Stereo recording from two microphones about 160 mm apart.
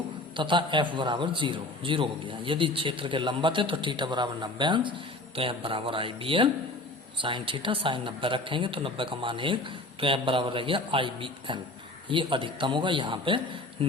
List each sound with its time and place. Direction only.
0.3 s a man's voice: 30° right (ahead or behind)